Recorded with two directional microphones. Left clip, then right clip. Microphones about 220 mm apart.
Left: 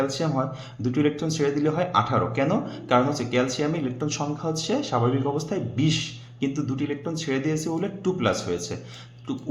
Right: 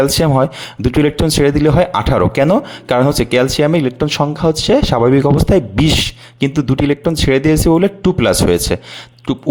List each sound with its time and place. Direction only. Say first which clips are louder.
0.0 s speech: right 13 dB; 50° right (ahead or behind)